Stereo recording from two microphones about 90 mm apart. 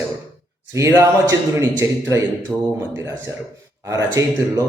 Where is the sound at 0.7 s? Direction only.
35° right (ahead or behind).